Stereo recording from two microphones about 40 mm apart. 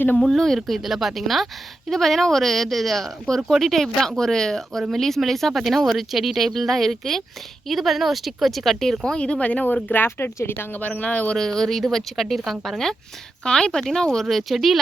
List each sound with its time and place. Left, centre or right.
0.2 s speech: centre
0.9 s speech: centre
3.3 s speech: centre
9.0 s speech: left
9.9 s speech: left
10.8 s speech: left
11.3 s speech: centre
13.4 s speech: centre
14.3 s speech: centre